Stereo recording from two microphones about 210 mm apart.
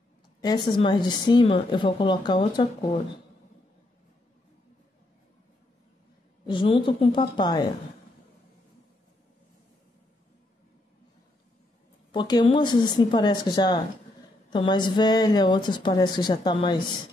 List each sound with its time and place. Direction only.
0.4 s speech: 20° left (ahead or behind)
6.4 s speech: 25° left (ahead or behind)
12.1 s speech: 20° left (ahead or behind)